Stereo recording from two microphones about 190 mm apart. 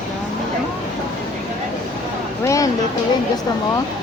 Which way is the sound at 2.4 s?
15° left (ahead or behind).